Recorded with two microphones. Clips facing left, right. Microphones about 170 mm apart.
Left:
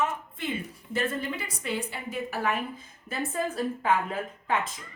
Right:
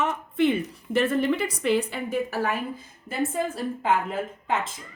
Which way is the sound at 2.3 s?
40° right (ahead or behind).